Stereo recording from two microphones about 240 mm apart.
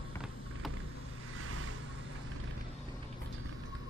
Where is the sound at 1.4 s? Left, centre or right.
Right.